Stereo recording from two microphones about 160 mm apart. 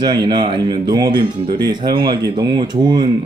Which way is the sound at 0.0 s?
30° right (ahead or behind).